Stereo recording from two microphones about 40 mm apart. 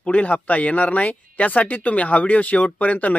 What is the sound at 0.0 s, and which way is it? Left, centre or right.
Speech, left.